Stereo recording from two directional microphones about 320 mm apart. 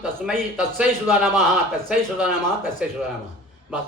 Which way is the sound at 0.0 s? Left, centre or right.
Centre.